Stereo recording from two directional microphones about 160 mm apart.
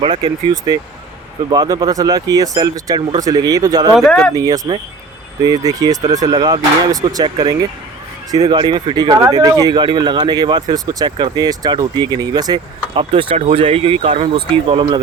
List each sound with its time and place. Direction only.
0.0 s speech: 25° right (ahead or behind)
3.9 s speech: 5° left (ahead or behind)
4.4 s speech: 20° right (ahead or behind)